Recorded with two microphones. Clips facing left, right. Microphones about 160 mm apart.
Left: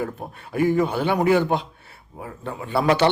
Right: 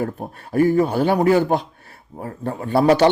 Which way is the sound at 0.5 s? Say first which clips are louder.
Right 4 dB; 40° right (ahead or behind).